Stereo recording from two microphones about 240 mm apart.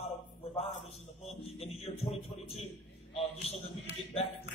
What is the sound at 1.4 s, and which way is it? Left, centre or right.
A man's voice, left.